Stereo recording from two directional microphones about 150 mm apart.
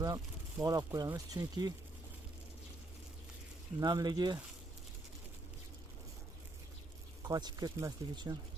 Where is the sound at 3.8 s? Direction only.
25° right (ahead or behind).